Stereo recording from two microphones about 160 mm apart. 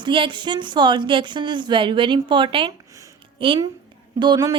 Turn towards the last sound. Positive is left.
turn(degrees=-25)  # may be behind; listen again after turning